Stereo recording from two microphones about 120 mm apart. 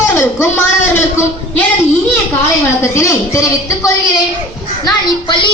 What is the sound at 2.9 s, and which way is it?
Speech, 25° left (ahead or behind).